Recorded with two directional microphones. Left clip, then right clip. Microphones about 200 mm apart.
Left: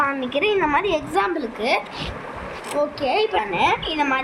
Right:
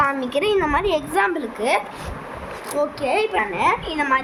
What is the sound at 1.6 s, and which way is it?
Speech, 40° right (ahead or behind).